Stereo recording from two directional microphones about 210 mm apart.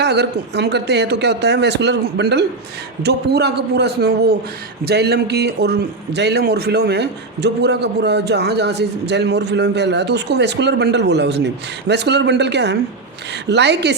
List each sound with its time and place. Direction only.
0.0 s a man's voice: 55° right (ahead or behind)